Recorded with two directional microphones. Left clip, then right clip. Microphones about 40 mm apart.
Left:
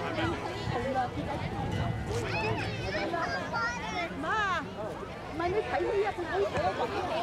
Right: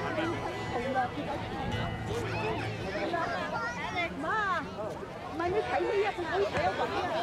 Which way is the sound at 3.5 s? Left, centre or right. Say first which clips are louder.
Left 2 dB; left.